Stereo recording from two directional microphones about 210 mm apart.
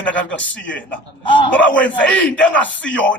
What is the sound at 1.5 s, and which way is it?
Speech, 5° left (ahead or behind).